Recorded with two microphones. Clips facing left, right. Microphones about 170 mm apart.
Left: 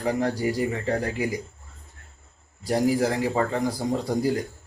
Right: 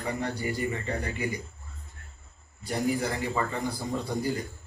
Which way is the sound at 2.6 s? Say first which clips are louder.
Left 6 dB; 90° left.